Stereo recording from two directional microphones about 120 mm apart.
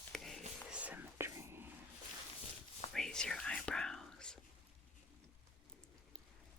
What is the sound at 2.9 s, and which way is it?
Whispering, 5° left (ahead or behind).